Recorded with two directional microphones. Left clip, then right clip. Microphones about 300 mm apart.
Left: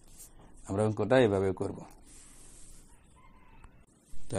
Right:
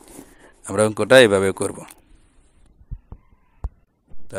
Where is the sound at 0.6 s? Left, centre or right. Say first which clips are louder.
Right 12 dB; right.